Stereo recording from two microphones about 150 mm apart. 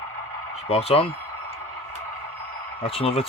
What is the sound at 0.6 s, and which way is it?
Speech, 45° left (ahead or behind).